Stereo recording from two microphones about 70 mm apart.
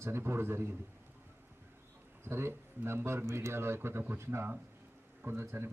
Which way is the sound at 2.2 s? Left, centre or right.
Right.